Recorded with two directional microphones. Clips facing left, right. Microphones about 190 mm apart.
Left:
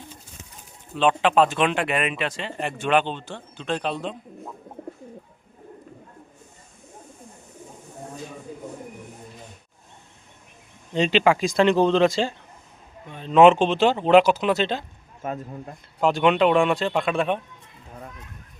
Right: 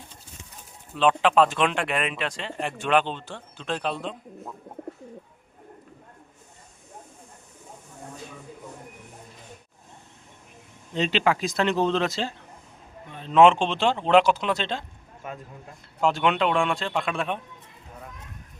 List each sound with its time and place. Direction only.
0.9 s speech: centre (ahead or behind)
10.9 s speech: centre (ahead or behind)
15.2 s speech: 45° left (ahead or behind)
16.0 s speech: centre (ahead or behind)